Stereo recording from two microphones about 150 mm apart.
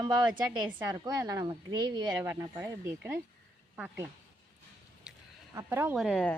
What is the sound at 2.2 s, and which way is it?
Speech, 15° right (ahead or behind).